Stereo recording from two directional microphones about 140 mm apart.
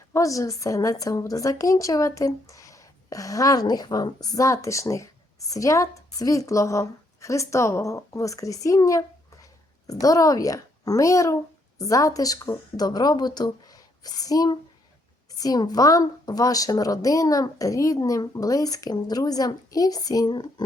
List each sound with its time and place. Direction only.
0.1 s a woman's voice: 25° left (ahead or behind)